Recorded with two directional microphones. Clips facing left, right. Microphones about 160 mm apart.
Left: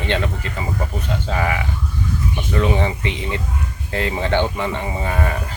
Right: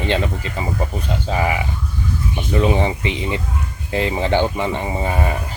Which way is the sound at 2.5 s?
20° right (ahead or behind).